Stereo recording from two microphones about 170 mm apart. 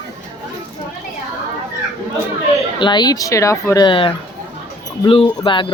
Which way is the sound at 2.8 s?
25° left (ahead or behind).